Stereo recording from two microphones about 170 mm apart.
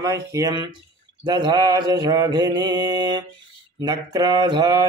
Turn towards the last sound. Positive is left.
turn(degrees=-25)  # may be behind; listen again after turning